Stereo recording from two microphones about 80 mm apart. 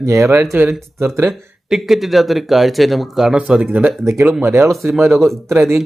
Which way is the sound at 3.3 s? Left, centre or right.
Centre.